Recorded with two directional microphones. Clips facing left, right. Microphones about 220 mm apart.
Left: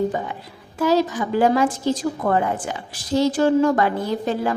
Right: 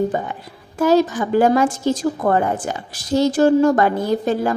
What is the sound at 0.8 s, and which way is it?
A woman's voice, 50° right (ahead or behind).